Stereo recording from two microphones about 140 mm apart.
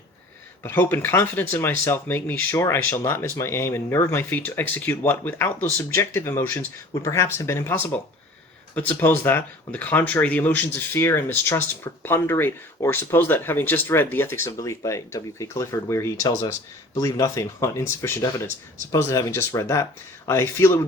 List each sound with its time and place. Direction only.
0.6 s speech: 15° left (ahead or behind)